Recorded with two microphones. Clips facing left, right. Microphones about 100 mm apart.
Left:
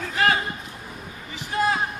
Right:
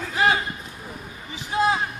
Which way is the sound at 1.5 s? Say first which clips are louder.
Right 2 dB; 15° right (ahead or behind).